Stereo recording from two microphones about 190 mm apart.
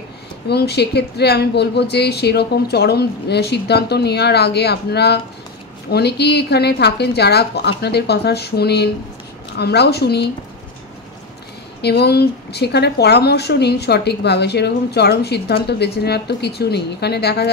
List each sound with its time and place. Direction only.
0.5 s speech: 60° left (ahead or behind)
11.8 s speech: 60° left (ahead or behind)